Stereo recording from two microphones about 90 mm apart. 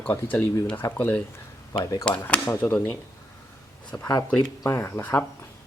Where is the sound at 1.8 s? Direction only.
40° left (ahead or behind).